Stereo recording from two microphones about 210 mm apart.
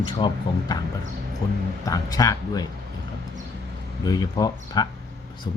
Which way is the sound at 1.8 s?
15° left (ahead or behind).